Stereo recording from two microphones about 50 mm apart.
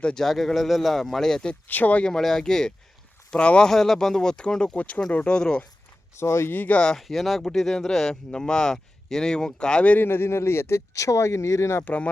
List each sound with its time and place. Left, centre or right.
0.0 s speech: centre
0.3 s a man's voice: centre
1.6 s speech: left
2.0 s speech: centre
3.7 s speech: centre
6.1 s speech: left
6.5 s speech: left
6.7 s speech: centre
7.1 s a man's voice: centre
10.0 s speech: left